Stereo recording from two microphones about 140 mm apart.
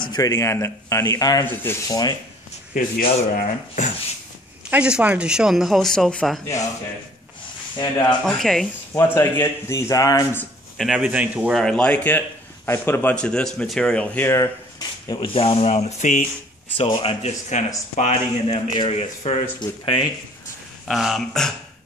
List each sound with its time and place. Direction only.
0.0 s a man's voice: 30° left (ahead or behind)
1.4 s speech: 15° left (ahead or behind)
2.7 s speech: 90° left
4.6 s speech: 10° right (ahead or behind)
7.7 s a man's voice: 30° left (ahead or behind)
8.3 s speech: centre (ahead or behind)
8.9 s a man's voice: 15° left (ahead or behind)
10.8 s speech: 5° right (ahead or behind)
11.6 s speech: 5° left (ahead or behind)
14.8 s speech: 30° left (ahead or behind); by 16.3 s 60° left (ahead or behind)
16.7 s speech: 40° left (ahead or behind)
19.6 s speech: 35° left (ahead or behind)
20.8 s speech: centre (ahead or behind)